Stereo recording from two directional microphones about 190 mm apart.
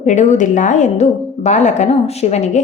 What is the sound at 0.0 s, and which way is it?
A woman's voice, 40° left (ahead or behind).